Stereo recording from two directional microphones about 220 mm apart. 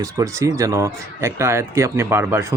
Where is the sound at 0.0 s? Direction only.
15° right (ahead or behind).